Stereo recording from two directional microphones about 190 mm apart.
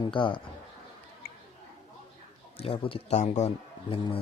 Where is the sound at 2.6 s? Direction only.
30° left (ahead or behind).